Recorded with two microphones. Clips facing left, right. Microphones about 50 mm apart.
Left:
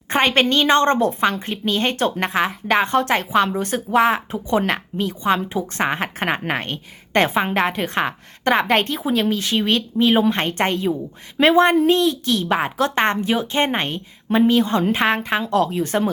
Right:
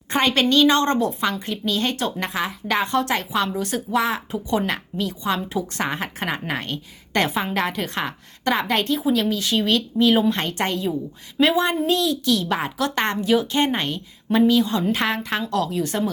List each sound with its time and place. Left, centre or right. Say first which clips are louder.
0.1 s a woman's voice: left 2 dB; left